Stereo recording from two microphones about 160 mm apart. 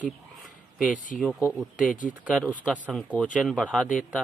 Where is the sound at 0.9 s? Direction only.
55° left (ahead or behind).